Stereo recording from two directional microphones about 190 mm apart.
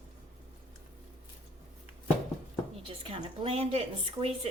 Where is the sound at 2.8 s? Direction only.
30° right (ahead or behind).